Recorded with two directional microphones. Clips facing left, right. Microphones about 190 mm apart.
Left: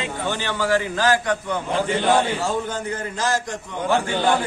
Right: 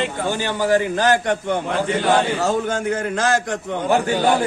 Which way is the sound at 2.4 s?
75° right (ahead or behind).